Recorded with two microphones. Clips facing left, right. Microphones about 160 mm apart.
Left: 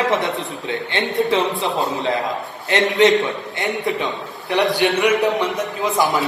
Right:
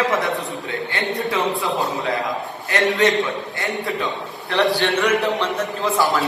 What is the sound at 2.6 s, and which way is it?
Speech, 20° left (ahead or behind).